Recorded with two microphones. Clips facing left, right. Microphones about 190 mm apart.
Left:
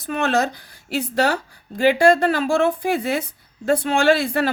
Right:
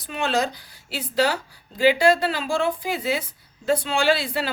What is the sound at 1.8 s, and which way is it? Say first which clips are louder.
A woman's voice: left 3 dB; 50° left (ahead or behind).